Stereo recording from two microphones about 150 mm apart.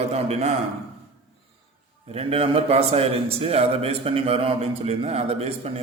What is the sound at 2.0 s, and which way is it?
A man's voice, 40° right (ahead or behind).